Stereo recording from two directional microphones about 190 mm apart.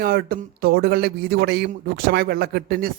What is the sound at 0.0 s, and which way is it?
A man's voice, 50° right (ahead or behind).